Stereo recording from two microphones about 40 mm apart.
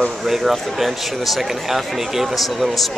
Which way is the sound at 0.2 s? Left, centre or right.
Centre.